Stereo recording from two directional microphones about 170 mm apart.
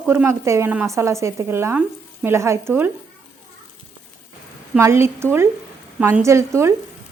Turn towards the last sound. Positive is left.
turn(degrees=-15)  # may be behind; listen again after turning